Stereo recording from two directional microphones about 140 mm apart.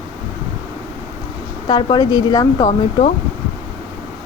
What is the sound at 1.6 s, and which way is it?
Speech, 30° left (ahead or behind).